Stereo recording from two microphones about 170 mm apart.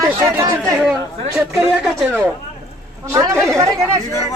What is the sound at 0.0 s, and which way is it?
Chatter, 20° right (ahead or behind).